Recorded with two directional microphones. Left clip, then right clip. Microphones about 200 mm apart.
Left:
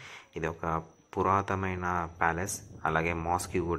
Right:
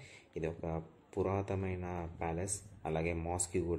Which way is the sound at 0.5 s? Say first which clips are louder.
Left 10 dB; 45° left (ahead or behind).